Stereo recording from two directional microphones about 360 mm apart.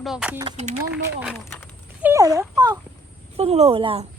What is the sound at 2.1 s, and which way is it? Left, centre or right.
Speech, centre.